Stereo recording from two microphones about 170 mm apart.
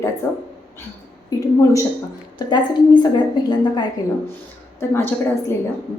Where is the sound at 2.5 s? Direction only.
25° left (ahead or behind).